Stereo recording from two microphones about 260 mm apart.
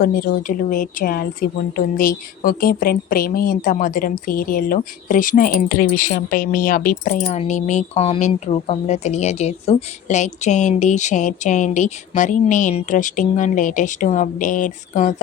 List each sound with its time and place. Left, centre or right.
0.0 s a woman's voice: left